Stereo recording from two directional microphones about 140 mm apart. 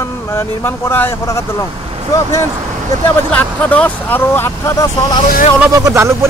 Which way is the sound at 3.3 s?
10° left (ahead or behind).